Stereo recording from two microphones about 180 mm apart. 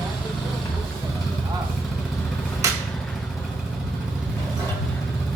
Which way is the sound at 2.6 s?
15° right (ahead or behind).